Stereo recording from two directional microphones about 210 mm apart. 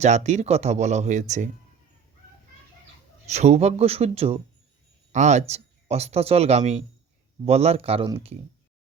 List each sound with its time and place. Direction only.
0.0 s speech: 30° right (ahead or behind)
3.2 s speech: 30° right (ahead or behind)